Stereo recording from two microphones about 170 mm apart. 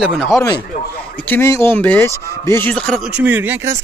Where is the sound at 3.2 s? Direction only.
10° right (ahead or behind).